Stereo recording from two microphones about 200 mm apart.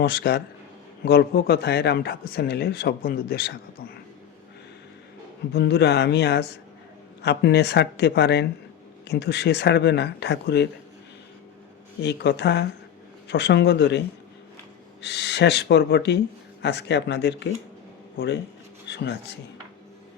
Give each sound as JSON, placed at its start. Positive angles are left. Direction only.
{"t": 0.0, "sound": "speech", "side_deg": 50}
{"t": 5.5, "sound": "speech", "side_deg": 55}
{"t": 12.0, "sound": "speech", "side_deg": 60}
{"t": 15.0, "sound": "speech", "side_deg": 60}
{"t": 18.9, "sound": "speech", "side_deg": 60}